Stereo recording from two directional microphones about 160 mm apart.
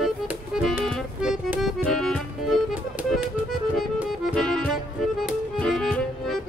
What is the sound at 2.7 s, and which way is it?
Music, 10° right (ahead or behind).